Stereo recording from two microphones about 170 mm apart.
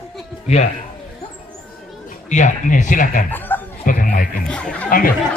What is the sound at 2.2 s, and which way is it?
Speech, 45° left (ahead or behind).